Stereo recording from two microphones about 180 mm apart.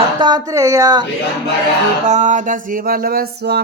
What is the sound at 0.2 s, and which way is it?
Speech, 25° right (ahead or behind).